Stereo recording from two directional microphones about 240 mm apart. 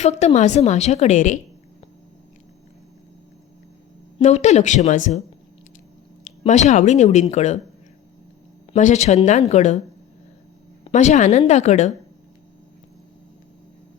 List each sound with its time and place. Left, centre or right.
0.0 s a woman's voice: left
4.2 s a woman's voice: left
6.4 s a woman's voice: left
8.7 s a woman's voice: left
10.8 s a woman's voice: left